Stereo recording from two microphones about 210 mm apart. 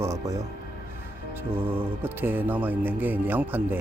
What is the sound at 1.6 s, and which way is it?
Speech, 10° right (ahead or behind).